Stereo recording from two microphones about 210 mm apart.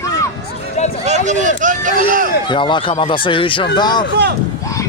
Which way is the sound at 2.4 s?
20° left (ahead or behind).